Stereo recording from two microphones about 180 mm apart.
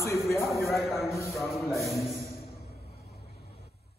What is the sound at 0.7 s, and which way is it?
A man's voice, centre (ahead or behind).